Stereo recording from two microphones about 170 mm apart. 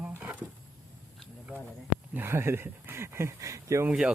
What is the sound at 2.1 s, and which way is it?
Speech, 15° right (ahead or behind).